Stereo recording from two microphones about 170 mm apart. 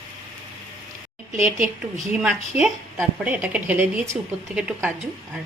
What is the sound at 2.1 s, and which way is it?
A woman's voice, 5° right (ahead or behind).